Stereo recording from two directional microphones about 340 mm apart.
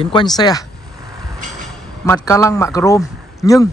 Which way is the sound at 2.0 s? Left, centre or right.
Centre.